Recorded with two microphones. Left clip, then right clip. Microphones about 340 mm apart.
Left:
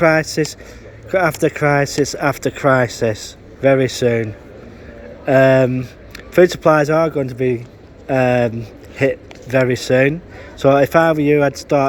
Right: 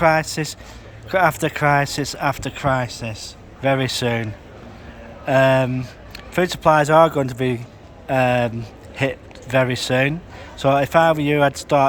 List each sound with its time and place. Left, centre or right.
0.0 s a man's voice: centre